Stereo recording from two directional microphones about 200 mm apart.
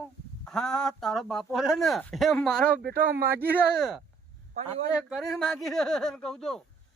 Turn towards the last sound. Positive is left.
turn(degrees=5)  # may be behind; listen again after turning